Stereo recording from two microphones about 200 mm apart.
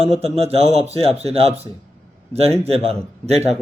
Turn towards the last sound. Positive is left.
turn(degrees=-30)  # may be behind; listen again after turning